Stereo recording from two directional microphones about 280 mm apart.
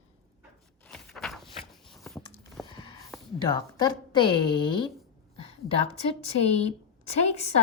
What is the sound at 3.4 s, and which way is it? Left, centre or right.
A woman's voice, centre.